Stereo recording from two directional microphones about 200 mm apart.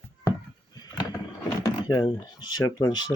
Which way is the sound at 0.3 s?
20° left (ahead or behind).